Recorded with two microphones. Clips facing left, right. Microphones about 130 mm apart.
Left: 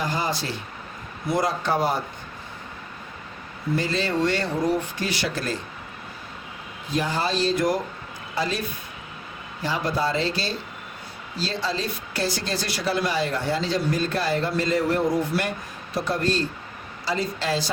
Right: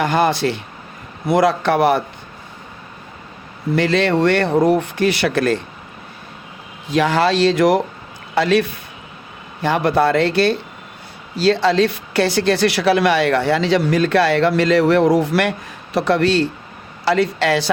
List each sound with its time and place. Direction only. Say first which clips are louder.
0.0 s speech: right 10 dB; 70° right (ahead or behind)
3.8 s speech: right 9 dB; 70° right (ahead or behind)
6.8 s speech: right 9 dB; 80° right
9.6 s speech: right 9 dB; 65° right (ahead or behind)